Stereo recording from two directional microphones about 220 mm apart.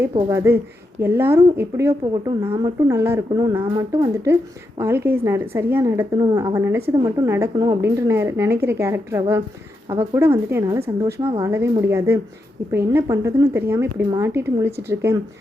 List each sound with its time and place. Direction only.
0.3 s a woman's voice: 15° right (ahead or behind)